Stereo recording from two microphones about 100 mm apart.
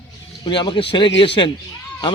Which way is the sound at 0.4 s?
50° left (ahead or behind).